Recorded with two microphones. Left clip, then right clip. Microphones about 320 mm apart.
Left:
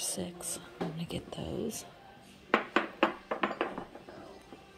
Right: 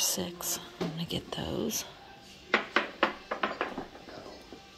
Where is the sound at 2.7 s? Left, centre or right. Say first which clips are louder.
Right 1 dB; left.